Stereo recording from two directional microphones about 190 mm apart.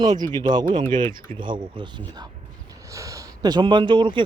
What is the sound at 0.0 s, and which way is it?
Speech, 20° right (ahead or behind).